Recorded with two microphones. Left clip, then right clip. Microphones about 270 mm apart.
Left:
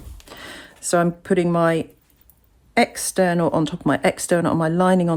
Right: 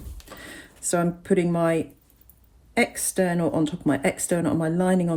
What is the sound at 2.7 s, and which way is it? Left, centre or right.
Speech, left.